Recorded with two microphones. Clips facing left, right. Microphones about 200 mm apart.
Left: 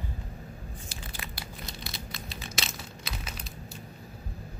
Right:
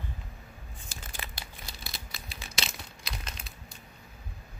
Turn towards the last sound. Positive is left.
turn(degrees=5)  # may be behind; listen again after turning